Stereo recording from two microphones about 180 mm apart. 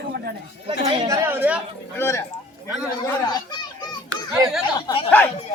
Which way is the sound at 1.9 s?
15° left (ahead or behind).